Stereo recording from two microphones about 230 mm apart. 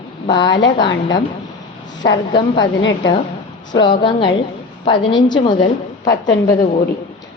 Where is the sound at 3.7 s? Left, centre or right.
Left.